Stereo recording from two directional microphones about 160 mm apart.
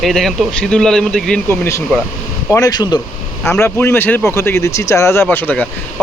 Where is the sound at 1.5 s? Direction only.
15° left (ahead or behind).